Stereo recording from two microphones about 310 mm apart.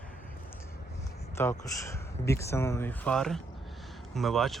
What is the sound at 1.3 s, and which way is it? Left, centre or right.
A man's voice, centre.